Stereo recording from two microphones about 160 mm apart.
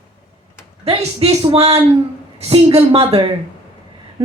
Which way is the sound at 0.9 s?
40° right (ahead or behind).